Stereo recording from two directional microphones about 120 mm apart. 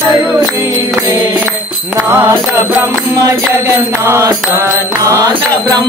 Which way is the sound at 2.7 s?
20° right (ahead or behind).